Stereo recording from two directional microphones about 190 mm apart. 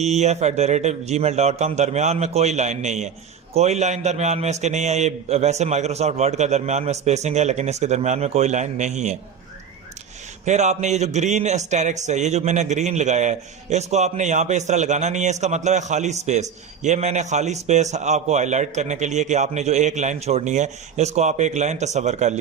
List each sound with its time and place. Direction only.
0.0 s speech: 35° right (ahead or behind)
10.4 s speech: 35° right (ahead or behind)